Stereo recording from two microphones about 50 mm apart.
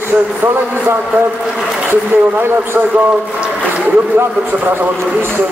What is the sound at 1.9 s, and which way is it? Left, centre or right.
Speech, right.